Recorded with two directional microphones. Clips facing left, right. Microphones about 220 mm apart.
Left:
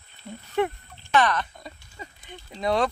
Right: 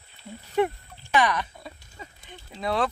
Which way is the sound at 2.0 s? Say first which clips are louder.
Left 2 dB; centre (ahead or behind).